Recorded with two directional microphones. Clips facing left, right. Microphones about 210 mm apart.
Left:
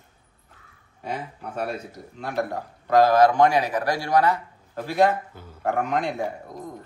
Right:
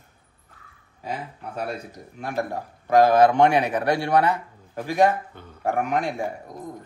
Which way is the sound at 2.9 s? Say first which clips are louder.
Right 1 dB; 20° right (ahead or behind).